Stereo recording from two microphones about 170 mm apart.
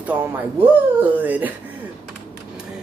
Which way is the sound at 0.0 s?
10° right (ahead or behind).